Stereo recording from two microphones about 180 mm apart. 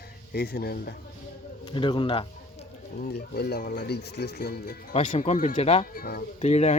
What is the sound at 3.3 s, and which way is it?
Speech, 60° left (ahead or behind).